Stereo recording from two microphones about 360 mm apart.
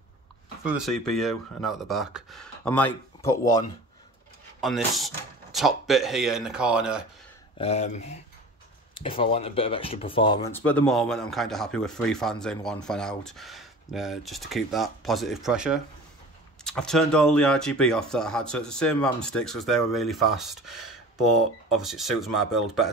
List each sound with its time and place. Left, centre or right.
0.7 s speech: centre
7.5 s speech: centre